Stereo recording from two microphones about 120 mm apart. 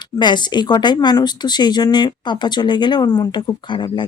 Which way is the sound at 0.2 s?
40° left (ahead or behind).